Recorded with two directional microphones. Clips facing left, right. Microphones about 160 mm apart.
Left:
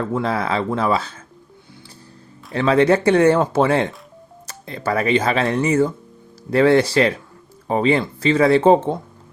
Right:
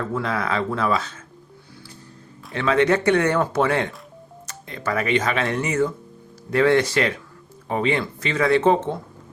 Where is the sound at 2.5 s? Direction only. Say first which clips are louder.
Left 4 dB; 30° left (ahead or behind).